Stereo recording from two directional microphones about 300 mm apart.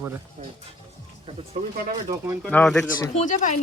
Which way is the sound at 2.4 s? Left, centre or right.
Centre.